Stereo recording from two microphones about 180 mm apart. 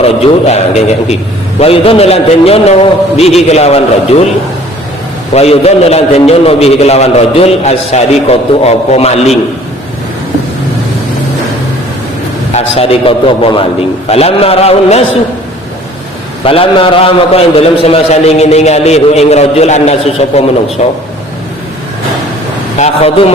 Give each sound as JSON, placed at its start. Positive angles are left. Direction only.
{"t": 0.0, "sound": "a man's voice", "side_deg": 35}
{"t": 5.3, "sound": "a man's voice", "side_deg": 35}
{"t": 12.5, "sound": "a man's voice", "side_deg": 35}
{"t": 16.4, "sound": "a man's voice", "side_deg": 30}
{"t": 22.8, "sound": "a man's voice", "side_deg": 35}